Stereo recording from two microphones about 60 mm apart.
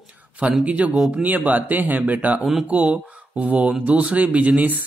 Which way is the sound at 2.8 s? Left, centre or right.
Centre.